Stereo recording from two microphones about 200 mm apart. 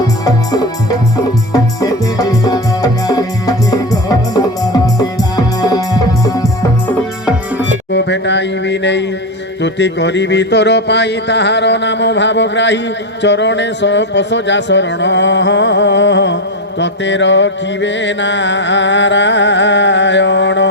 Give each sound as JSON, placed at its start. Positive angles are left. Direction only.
{"t": 1.5, "sound": "music", "side_deg": 20}
{"t": 7.9, "sound": "a sound", "side_deg": 65}
{"t": 9.6, "sound": "music", "side_deg": 60}